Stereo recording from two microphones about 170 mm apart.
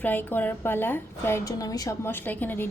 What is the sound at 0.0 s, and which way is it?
A woman's voice, 10° left (ahead or behind).